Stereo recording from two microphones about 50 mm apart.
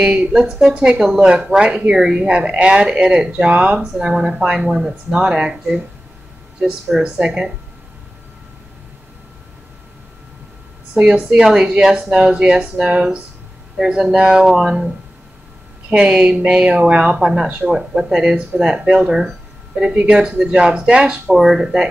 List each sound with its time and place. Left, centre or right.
0.0 s speech: right
0.3 s speech: centre; by 3.8 s right
4.0 s speech: centre
7.0 s speech: centre
11.0 s speech: centre
21.4 s speech: centre